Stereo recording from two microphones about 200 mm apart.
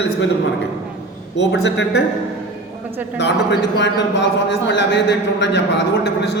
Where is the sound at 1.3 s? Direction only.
60° left (ahead or behind).